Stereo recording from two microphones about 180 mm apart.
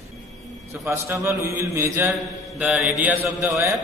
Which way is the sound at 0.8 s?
15° right (ahead or behind).